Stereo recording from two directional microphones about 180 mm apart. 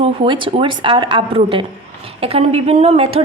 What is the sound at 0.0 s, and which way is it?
Speech, 30° right (ahead or behind).